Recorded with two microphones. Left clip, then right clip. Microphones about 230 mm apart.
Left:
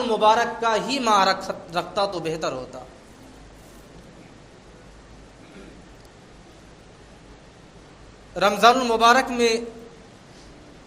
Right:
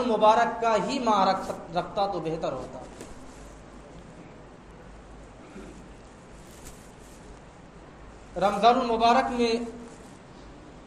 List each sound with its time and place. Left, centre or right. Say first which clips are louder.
0.0 s a man's voice: left 2 dB; left
8.4 s a man's voice: left 4 dB; left